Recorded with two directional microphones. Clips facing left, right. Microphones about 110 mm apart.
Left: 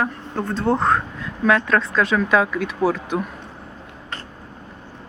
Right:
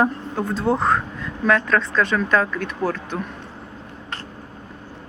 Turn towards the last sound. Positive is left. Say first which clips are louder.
# left 4 dB
turn(degrees=10)  # may be behind; listen again after turning